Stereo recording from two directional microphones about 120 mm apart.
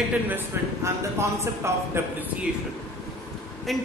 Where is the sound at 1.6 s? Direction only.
25° right (ahead or behind).